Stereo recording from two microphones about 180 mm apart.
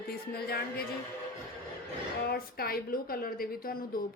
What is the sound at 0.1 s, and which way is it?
Speech, 60° left (ahead or behind).